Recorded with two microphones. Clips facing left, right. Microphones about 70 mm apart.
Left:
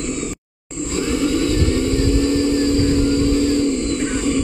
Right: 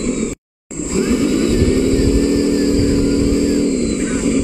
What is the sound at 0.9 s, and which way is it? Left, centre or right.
Vehicle, centre.